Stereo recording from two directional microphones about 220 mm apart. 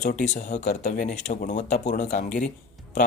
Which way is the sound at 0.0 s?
35° left (ahead or behind).